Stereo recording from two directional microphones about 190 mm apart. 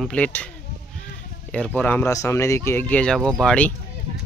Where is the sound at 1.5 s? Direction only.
5° left (ahead or behind).